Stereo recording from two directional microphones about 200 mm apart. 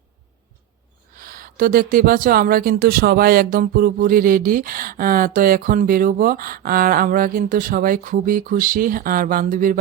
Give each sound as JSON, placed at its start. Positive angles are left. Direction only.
{"t": 1.1, "sound": "speech", "side_deg": -45}